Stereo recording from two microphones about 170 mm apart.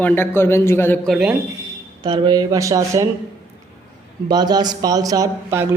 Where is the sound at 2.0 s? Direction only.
25° right (ahead or behind).